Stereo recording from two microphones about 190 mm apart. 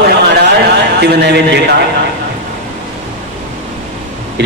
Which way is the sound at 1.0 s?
60° right (ahead or behind).